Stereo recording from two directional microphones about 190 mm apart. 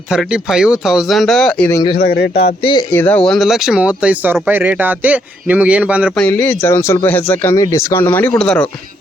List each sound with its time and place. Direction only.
0.1 s speech: 5° right (ahead or behind)
2.0 s speech: 55° left (ahead or behind)
2.9 s a man's voice: 10° left (ahead or behind); by 6.1 s 5° right (ahead or behind)
6.1 s speech: 10° left (ahead or behind)